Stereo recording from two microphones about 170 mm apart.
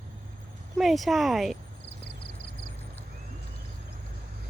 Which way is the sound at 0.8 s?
Centre (ahead or behind).